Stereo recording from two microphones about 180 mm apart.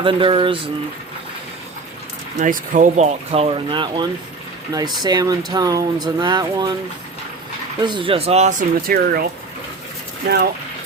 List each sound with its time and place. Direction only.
0.0 s speech: 30° right (ahead or behind)
2.4 s speech: 45° right (ahead or behind); by 6.7 s 25° right (ahead or behind)
7.8 s speech: 25° right (ahead or behind); by 9.2 s 50° right (ahead or behind)
10.2 s speech: 60° right (ahead or behind)